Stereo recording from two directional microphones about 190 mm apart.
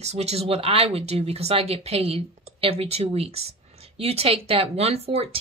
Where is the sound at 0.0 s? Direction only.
35° right (ahead or behind).